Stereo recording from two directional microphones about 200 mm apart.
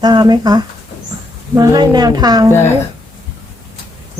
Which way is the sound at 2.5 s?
10° left (ahead or behind).